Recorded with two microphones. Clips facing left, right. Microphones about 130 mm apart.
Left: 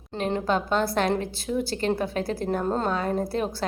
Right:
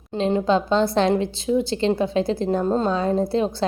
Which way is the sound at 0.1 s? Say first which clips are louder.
Right 6 dB; 15° right (ahead or behind).